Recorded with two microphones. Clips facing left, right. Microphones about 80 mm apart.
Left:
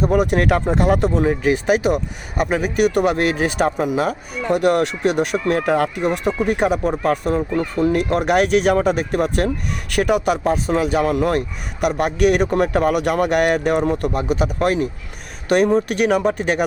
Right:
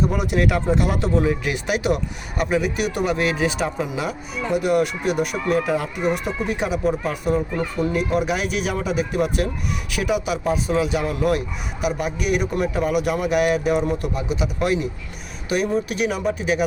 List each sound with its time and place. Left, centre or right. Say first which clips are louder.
0.3 s speech: left 3 dB; left
2.5 s speech: left 5 dB; left
4.5 s speech: left 3 dB; left
11.9 s speech: left 6 dB; left
15.4 s speech: left 6 dB; left